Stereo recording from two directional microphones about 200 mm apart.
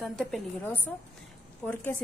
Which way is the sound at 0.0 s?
Centre (ahead or behind).